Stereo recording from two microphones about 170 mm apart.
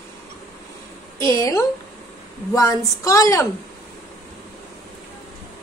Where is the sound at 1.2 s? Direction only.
20° left (ahead or behind).